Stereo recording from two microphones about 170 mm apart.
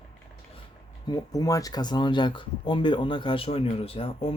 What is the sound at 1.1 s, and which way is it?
Speech, 20° left (ahead or behind).